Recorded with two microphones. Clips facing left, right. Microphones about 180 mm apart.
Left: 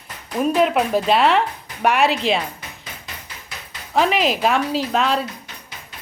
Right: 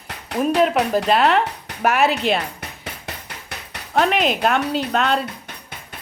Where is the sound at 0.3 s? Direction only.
Centre (ahead or behind).